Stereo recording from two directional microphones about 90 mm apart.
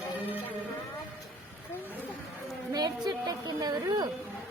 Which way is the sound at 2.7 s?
50° right (ahead or behind).